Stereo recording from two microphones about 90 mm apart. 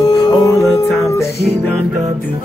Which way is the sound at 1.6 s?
15° left (ahead or behind).